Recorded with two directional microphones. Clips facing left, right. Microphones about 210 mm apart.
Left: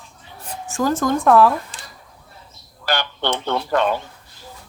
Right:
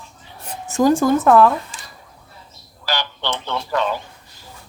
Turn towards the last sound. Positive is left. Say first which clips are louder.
# left 3 dB
turn(degrees=55)  # may be behind; listen again after turning